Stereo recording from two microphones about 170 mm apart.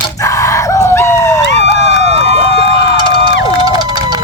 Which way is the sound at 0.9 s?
15° left (ahead or behind).